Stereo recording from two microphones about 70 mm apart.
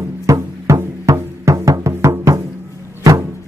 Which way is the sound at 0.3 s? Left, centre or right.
Right.